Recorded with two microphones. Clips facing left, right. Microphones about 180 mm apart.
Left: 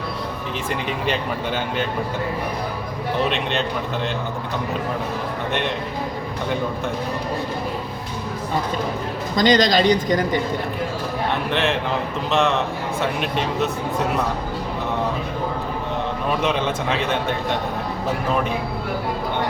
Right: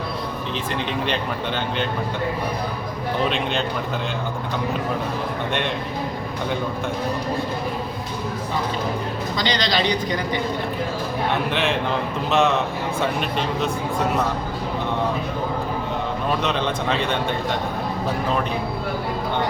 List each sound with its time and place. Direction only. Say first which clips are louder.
3.2 s a man's voice: even; centre (ahead or behind)
5.5 s a man's voice: left 2 dB; centre (ahead or behind)
9.3 s speech: left 8 dB; 45° left (ahead or behind)
11.5 s a man's voice: left 1 dB; centre (ahead or behind)
16.4 s a man's voice: left 1 dB; 5° left (ahead or behind)